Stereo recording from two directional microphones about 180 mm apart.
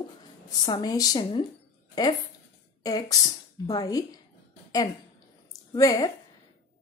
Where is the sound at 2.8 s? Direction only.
20° left (ahead or behind).